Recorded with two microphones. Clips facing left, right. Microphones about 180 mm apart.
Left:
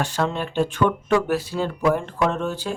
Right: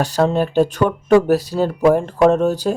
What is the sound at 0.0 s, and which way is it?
Speech, 35° right (ahead or behind).